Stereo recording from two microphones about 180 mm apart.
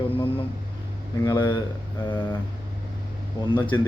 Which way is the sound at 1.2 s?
25° left (ahead or behind).